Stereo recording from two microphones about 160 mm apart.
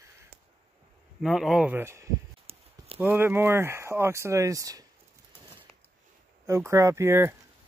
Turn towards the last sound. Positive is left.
turn(degrees=-15)  # may be behind; listen again after turning